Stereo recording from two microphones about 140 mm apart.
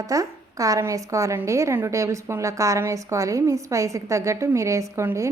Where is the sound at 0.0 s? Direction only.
25° right (ahead or behind).